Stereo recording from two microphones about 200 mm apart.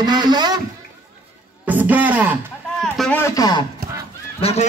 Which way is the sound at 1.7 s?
10° right (ahead or behind).